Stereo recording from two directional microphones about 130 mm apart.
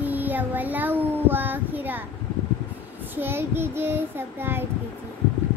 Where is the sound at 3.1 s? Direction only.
15° right (ahead or behind).